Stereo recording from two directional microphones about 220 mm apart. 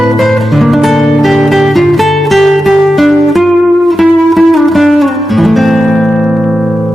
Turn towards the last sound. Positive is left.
turn(degrees=0)  # may be behind; listen again after turning